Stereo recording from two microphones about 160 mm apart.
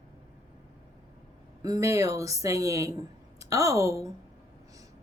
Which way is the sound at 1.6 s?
20° right (ahead or behind).